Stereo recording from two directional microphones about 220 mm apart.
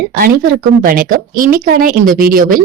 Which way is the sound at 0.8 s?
40° right (ahead or behind).